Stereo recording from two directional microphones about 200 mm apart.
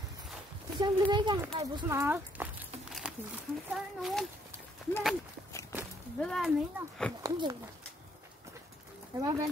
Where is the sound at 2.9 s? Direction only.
Centre (ahead or behind).